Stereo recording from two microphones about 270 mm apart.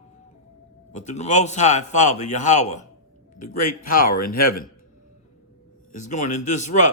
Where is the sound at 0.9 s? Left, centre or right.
Left.